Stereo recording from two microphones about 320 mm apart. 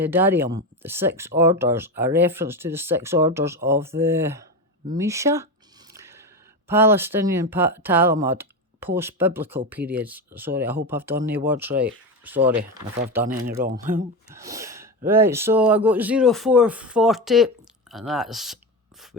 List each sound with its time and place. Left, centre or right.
0.0 s speech: centre
5.9 s a sound: centre
6.7 s speech: centre
8.2 s typing: centre
9.0 s speech: centre
13.8 s speech: right
14.3 s speech: centre